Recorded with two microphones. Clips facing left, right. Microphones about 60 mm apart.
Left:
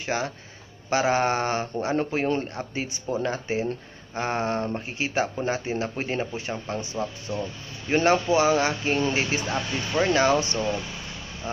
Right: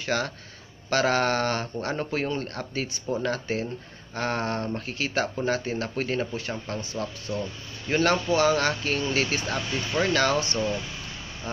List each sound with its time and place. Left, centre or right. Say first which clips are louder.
0.0 s speech: even; left